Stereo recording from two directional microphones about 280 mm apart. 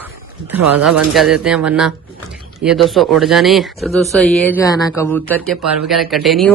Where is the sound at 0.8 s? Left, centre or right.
Centre.